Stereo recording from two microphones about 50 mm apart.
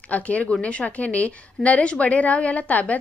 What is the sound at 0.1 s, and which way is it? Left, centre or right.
A woman's voice, left.